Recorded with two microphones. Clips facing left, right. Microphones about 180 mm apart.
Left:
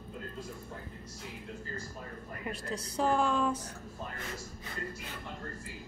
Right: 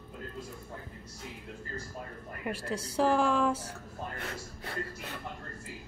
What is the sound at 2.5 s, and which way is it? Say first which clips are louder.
Speech: right 4 dB; 10° right (ahead or behind).